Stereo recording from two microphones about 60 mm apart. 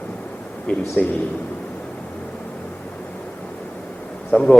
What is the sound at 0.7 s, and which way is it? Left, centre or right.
Speech, centre.